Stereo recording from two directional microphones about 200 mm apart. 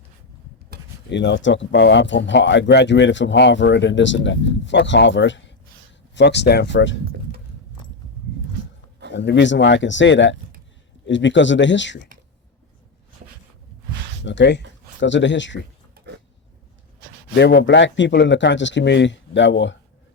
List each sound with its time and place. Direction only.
1.1 s speech: 60° left (ahead or behind)
9.1 s speech: 65° left (ahead or behind)
14.3 s speech: 60° left (ahead or behind)
16.0 s creak: 55° right (ahead or behind)
17.3 s speech: 60° left (ahead or behind)